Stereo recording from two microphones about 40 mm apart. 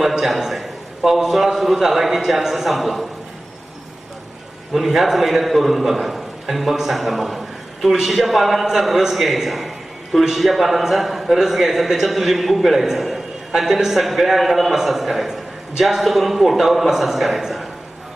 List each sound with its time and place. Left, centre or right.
0.0 s a man's voice: centre
4.7 s a man's voice: centre